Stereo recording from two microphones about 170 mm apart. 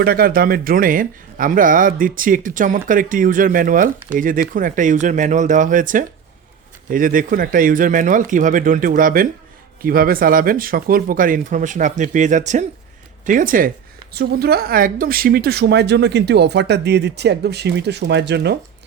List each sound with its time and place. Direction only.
0.0 s speech: 60° right (ahead or behind)
14.1 s speech: 70° right (ahead or behind); by 18.5 s 90° right